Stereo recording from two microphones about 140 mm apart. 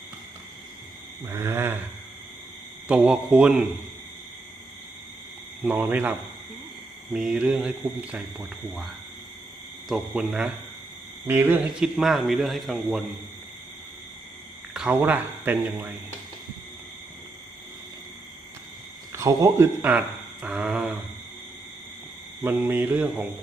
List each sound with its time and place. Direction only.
1.2 s a man's voice: 15° right (ahead or behind)
2.8 s a man's voice: 10° right (ahead or behind)
5.6 s a man's voice: 15° right (ahead or behind)
9.9 s speech: 5° right (ahead or behind)
14.7 s speech: 5° right (ahead or behind)
19.1 s a man's voice: 25° right (ahead or behind)
22.4 s a man's voice: 15° right (ahead or behind)